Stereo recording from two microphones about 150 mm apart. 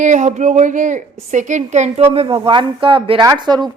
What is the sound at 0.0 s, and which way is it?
A woman's voice, 55° right (ahead or behind).